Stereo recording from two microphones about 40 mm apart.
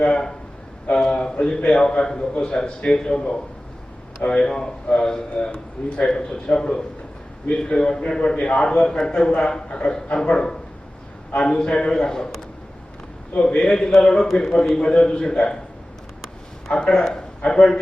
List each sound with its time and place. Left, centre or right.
0.0 s a man's voice: left
13.4 s a man's voice: centre
16.9 s speech: centre